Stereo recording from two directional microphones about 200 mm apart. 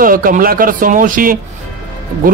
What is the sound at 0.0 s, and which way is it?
Speech, 45° right (ahead or behind).